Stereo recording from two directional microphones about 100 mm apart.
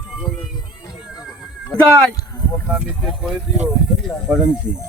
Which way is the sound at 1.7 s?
10° left (ahead or behind).